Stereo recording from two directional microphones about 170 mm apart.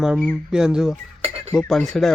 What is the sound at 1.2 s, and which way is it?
Dishes, 35° right (ahead or behind).